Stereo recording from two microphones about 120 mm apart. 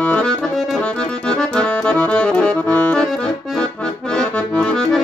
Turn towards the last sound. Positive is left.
turn(degrees=5)  # may be behind; listen again after turning